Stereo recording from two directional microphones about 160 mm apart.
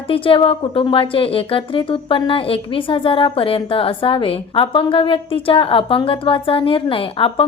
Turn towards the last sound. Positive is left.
turn(degrees=35)  # may be behind; listen again after turning